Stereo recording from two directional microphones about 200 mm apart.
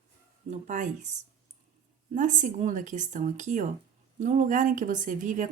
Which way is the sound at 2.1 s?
40° right (ahead or behind).